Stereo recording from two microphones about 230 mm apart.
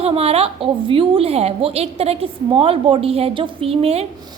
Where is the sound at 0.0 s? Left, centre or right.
Right.